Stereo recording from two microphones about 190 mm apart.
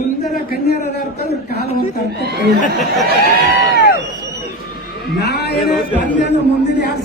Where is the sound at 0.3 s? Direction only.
55° left (ahead or behind).